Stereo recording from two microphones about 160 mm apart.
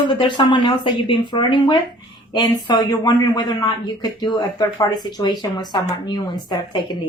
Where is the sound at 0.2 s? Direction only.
30° left (ahead or behind).